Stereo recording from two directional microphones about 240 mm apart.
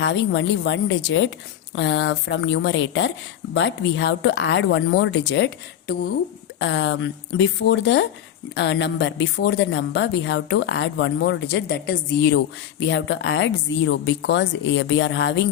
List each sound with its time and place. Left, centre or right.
0.0 s speech: left
6.6 s speech: left